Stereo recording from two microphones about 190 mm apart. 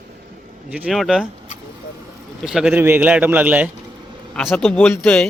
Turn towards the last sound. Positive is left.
turn(degrees=5)  # may be behind; listen again after turning